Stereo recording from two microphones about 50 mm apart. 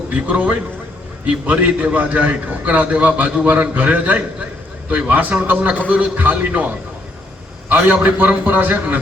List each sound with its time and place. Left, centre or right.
0.1 s a man's voice: right
8.0 s speech: right